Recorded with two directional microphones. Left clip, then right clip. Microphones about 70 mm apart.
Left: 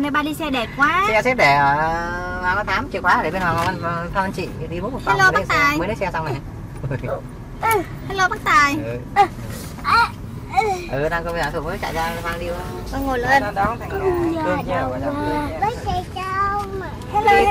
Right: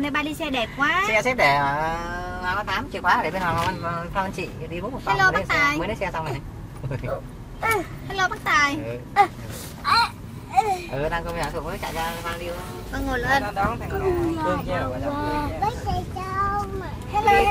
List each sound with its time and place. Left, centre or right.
0.0 s speech: centre
6.0 s speech: centre
8.1 s speech: centre
9.8 s a sound: right; by 11.2 s centre
11.4 s speech: centre
12.9 s speech: centre
13.5 s speech: centre; by 16.0 s right
16.2 s child singing: centre
17.2 s speech: centre